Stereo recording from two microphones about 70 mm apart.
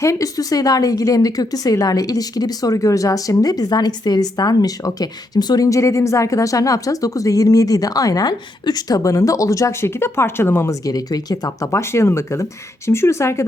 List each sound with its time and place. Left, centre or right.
0.0 s speech: left
5.6 s speech: left
9.0 s speech: left
9.9 s speech: left
10.7 s speech: left
11.7 s speech: left